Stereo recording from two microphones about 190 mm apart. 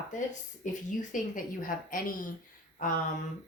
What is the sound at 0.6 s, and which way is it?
Speech, 40° left (ahead or behind).